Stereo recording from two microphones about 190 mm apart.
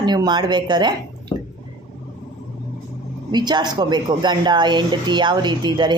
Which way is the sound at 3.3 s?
20° right (ahead or behind).